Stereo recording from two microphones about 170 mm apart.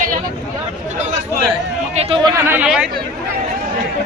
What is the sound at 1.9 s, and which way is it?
Speech, 35° right (ahead or behind).